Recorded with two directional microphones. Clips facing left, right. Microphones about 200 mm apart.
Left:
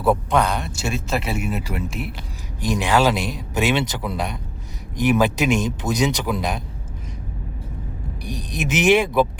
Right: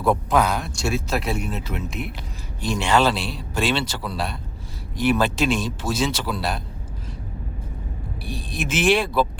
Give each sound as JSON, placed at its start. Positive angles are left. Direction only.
{"t": 0.0, "sound": "speech", "side_deg": 0}
{"t": 8.3, "sound": "speech", "side_deg": 15}